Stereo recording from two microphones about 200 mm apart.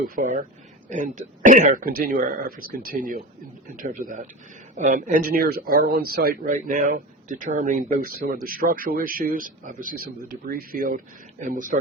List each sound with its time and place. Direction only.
0.2 s speech: 40° right (ahead or behind)